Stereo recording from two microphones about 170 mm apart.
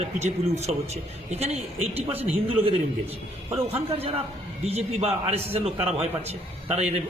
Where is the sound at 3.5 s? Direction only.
35° right (ahead or behind).